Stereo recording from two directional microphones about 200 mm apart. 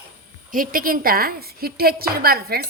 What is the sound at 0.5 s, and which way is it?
A woman's voice, 45° right (ahead or behind).